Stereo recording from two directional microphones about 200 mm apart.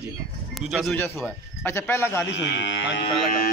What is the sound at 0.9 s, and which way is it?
A man's voice, 10° left (ahead or behind).